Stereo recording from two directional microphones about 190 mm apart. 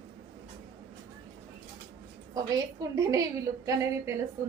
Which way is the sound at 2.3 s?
20° right (ahead or behind).